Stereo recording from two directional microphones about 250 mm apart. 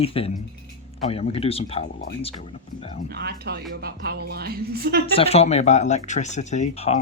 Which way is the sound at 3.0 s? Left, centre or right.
Right.